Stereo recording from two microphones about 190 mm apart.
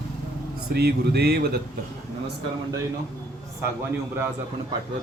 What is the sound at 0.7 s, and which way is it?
Speech, 55° right (ahead or behind).